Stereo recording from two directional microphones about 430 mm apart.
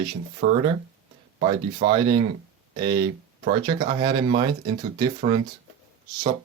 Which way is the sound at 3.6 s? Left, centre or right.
Centre.